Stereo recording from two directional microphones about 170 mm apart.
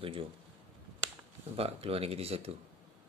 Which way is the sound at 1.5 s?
35° right (ahead or behind).